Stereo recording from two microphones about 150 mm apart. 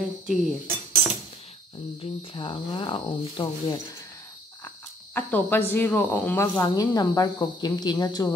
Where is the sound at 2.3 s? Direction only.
35° left (ahead or behind).